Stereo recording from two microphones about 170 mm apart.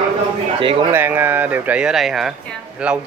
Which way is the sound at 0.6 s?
30° right (ahead or behind).